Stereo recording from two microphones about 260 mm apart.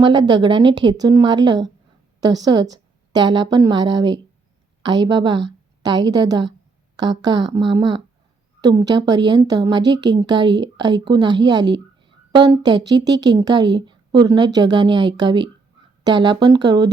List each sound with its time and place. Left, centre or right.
0.0 s a woman's voice: centre